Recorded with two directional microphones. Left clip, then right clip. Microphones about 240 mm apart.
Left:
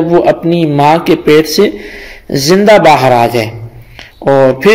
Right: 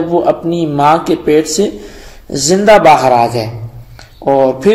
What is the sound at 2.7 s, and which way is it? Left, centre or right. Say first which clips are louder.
Speech: even; left.